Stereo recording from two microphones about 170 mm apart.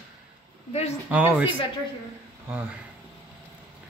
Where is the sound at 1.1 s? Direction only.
10° right (ahead or behind).